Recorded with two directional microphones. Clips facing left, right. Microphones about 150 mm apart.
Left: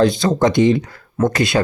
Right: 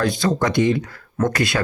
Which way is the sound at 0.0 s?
25° left (ahead or behind).